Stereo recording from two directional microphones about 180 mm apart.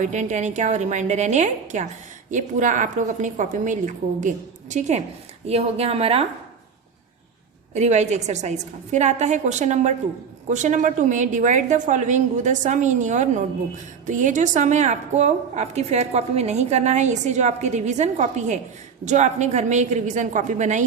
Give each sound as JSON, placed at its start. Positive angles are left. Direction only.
{"t": 0.0, "sound": "a woman's voice", "side_deg": -40}
{"t": 7.7, "sound": "a woman's voice", "side_deg": -40}